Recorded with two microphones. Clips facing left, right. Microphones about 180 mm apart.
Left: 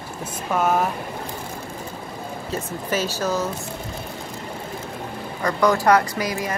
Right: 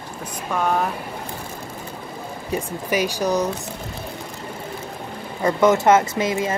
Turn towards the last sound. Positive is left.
turn(degrees=-25)  # may be behind; listen again after turning